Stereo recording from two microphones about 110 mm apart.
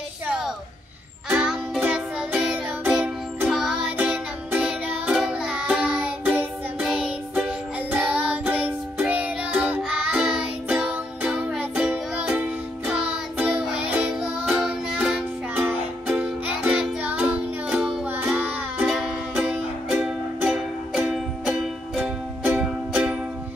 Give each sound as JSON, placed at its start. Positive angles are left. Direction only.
{"t": 1.3, "sound": "music", "side_deg": -5}
{"t": 18.9, "sound": "music", "side_deg": -5}
{"t": 20.4, "sound": "music", "side_deg": -5}